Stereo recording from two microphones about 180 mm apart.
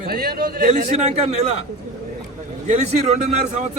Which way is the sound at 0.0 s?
55° right (ahead or behind).